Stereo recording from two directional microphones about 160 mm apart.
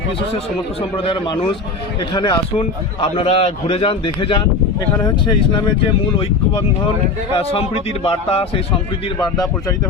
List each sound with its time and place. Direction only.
0.3 s a man's voice: 35° left (ahead or behind)
7.3 s a man's voice: 35° left (ahead or behind)
9.1 s speech: 20° left (ahead or behind)